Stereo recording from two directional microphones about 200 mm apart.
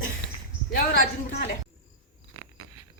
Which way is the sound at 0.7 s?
50° left (ahead or behind).